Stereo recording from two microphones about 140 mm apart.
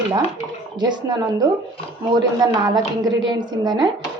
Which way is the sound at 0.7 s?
30° right (ahead or behind).